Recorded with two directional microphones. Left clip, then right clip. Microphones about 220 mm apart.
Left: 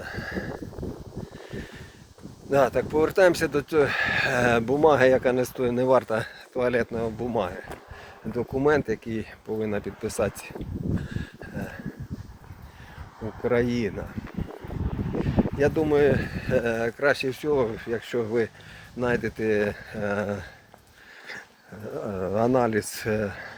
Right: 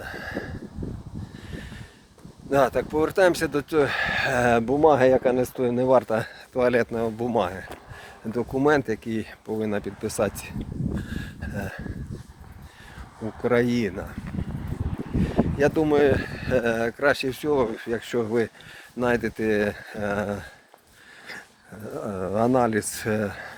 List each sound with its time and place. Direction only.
0.0 s a sound: 15° right (ahead or behind)
2.5 s speech: 15° right (ahead or behind)
11.0 s a sound: 40° right (ahead or behind)
13.1 s speech: 30° right (ahead or behind)
15.2 s speech: 25° right (ahead or behind)
21.8 s speech: 15° right (ahead or behind)